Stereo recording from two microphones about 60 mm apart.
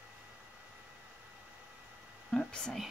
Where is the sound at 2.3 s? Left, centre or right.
Centre.